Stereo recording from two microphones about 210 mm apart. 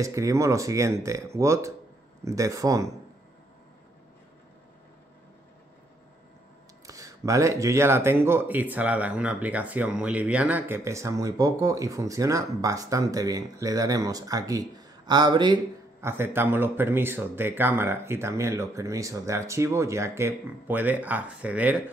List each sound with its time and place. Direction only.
0.0 s speech: 15° right (ahead or behind)
6.9 s speech: 15° right (ahead or behind)